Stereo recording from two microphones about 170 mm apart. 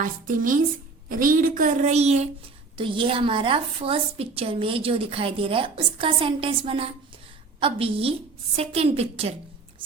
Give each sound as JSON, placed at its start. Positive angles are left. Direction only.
{"t": 0.0, "sound": "a woman's voice", "side_deg": -50}